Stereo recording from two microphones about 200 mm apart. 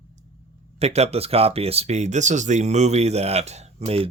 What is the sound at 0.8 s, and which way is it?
Speech, 30° right (ahead or behind).